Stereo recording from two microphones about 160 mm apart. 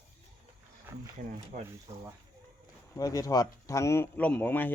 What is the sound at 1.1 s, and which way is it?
Speech, 55° right (ahead or behind).